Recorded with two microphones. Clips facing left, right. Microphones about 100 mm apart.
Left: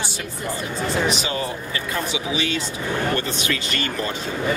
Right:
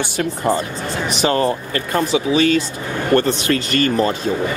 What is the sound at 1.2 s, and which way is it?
Speech, 55° right (ahead or behind).